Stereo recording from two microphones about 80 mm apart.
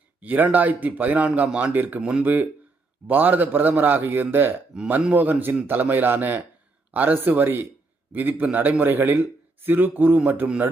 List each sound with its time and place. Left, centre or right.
0.2 s a man's voice: right